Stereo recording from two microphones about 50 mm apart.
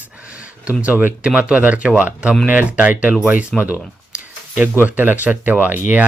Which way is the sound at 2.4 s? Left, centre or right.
Right.